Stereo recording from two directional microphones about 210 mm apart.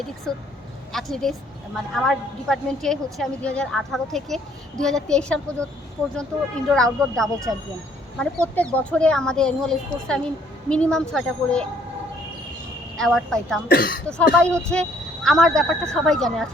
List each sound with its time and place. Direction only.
0.3 s a woman's voice: centre (ahead or behind)
6.7 s a woman's voice: centre (ahead or behind)
13.0 s a woman's voice: centre (ahead or behind)
13.7 s speech: 45° left (ahead or behind)
14.1 s a woman's voice: 5° left (ahead or behind)